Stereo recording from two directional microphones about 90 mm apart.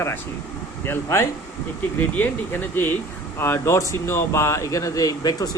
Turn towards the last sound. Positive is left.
turn(degrees=45)  # may be behind; listen again after turning